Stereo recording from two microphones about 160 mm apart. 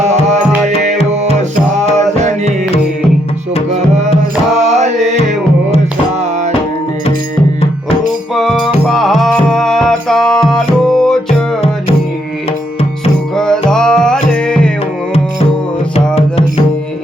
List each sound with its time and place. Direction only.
1.1 s music: 45° right (ahead or behind)
3.7 s music: 45° right (ahead or behind)
4.5 s mantra: 45° right (ahead or behind)
8.4 s music: centre (ahead or behind)
13.3 s music: 5° left (ahead or behind)